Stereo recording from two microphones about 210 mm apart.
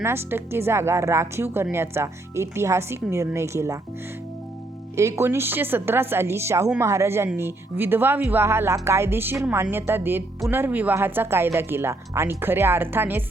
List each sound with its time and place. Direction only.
0.0 s a woman's voice: 10° right (ahead or behind)
4.9 s a woman's voice: 15° right (ahead or behind)